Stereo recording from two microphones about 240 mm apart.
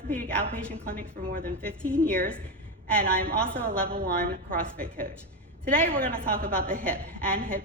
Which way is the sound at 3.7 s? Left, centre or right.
Right.